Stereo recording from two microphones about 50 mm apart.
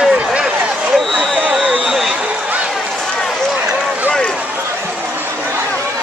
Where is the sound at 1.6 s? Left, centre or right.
Centre.